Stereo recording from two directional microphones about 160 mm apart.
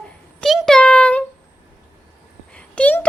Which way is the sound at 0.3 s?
Centre (ahead or behind).